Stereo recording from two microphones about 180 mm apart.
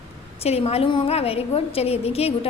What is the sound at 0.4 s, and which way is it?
A woman's voice, 35° left (ahead or behind).